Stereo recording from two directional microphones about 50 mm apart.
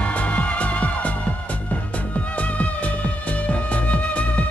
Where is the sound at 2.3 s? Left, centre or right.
Left.